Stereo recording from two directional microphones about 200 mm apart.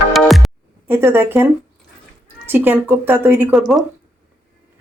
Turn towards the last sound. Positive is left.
turn(degrees=0)  # may be behind; listen again after turning